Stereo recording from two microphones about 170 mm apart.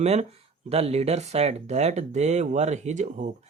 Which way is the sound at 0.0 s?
40° right (ahead or behind).